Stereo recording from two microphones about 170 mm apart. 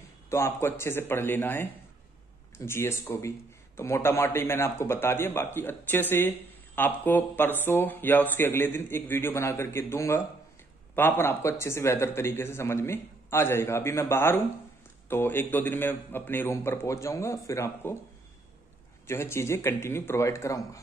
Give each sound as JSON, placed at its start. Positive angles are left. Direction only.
{"t": 0.3, "sound": "a man's voice", "side_deg": 15}
{"t": 19.0, "sound": "a man's voice", "side_deg": 15}